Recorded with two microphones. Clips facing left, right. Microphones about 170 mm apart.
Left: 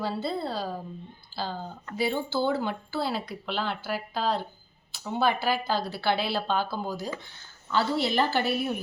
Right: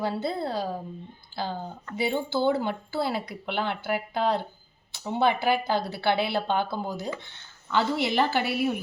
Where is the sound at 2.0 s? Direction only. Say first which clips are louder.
Right 1 dB; 20° right (ahead or behind).